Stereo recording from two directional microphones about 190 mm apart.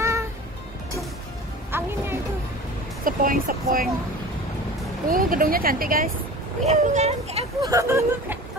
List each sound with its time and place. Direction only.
1.7 s music: 10° right (ahead or behind)
3.1 s speech: 45° right (ahead or behind)
5.0 s speech: 50° right (ahead or behind)
6.6 s speech: 35° right (ahead or behind)
7.6 s speech: 15° right (ahead or behind)